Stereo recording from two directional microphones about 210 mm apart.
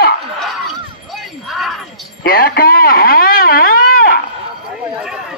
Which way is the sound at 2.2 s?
45° left (ahead or behind).